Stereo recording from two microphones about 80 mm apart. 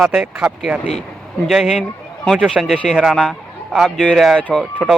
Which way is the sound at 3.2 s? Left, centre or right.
Centre.